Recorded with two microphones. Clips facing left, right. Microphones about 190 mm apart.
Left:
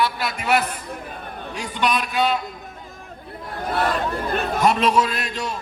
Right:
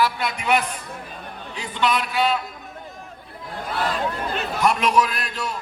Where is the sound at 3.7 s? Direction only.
55° left (ahead or behind).